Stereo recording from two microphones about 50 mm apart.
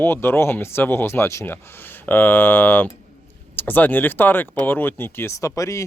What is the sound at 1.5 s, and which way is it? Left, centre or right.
Speech, left.